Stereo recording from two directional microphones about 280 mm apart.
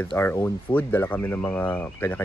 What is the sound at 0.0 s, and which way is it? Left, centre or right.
Speech, centre.